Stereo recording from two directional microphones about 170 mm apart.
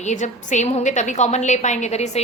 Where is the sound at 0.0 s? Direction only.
45° left (ahead or behind).